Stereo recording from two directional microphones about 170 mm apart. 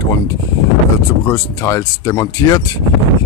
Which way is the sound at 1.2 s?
15° left (ahead or behind).